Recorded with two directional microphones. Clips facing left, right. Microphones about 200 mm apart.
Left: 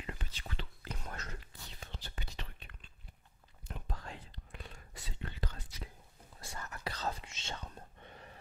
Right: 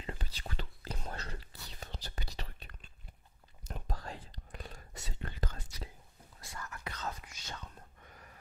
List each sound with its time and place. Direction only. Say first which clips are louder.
0.0 s whispering: right 2 dB; 35° right (ahead or behind)
6.4 s whispering: left 2 dB; 30° left (ahead or behind)